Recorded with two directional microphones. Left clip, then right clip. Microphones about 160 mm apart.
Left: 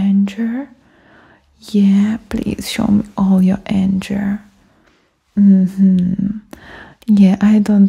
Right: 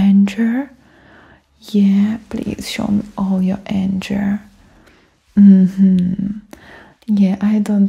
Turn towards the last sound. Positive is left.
turn(degrees=35)  # may be behind; listen again after turning